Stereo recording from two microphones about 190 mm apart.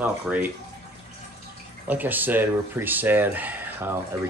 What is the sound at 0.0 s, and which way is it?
Speech, 10° right (ahead or behind).